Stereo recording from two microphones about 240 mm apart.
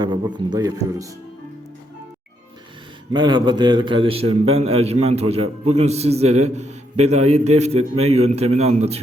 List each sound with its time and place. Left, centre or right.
0.0 s a man's voice: centre
3.1 s a man's voice: centre